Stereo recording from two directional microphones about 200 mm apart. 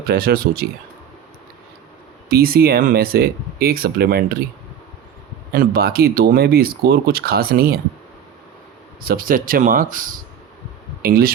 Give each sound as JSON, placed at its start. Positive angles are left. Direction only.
{"t": 0.0, "sound": "speech", "side_deg": -50}
{"t": 2.3, "sound": "speech", "side_deg": -50}
{"t": 5.5, "sound": "speech", "side_deg": -50}
{"t": 9.0, "sound": "speech", "side_deg": -45}